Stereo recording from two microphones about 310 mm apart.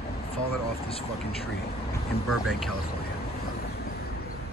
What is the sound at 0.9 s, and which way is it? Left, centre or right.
Speech, centre.